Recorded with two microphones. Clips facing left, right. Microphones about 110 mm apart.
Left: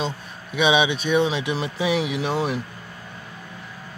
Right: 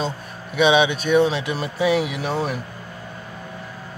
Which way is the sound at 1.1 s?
10° left (ahead or behind).